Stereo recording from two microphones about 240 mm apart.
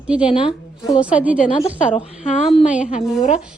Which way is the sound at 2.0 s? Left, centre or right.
Left.